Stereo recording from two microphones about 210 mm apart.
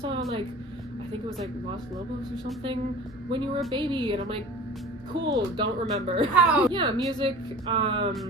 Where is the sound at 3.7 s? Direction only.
25° right (ahead or behind).